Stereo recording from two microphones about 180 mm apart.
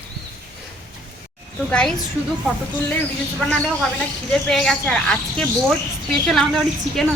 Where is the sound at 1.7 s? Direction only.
5° left (ahead or behind).